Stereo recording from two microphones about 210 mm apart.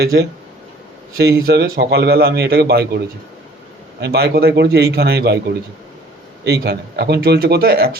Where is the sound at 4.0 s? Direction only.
50° right (ahead or behind).